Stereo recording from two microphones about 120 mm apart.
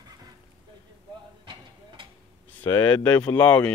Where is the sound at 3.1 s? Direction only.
10° left (ahead or behind).